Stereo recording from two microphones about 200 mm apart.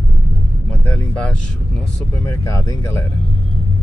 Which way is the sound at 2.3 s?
15° left (ahead or behind).